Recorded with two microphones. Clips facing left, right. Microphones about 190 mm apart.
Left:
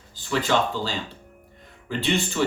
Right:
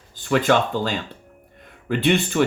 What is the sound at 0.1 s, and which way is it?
Speech, 55° right (ahead or behind).